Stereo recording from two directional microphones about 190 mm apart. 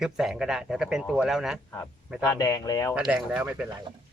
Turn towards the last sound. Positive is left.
turn(degrees=-5)  # may be behind; listen again after turning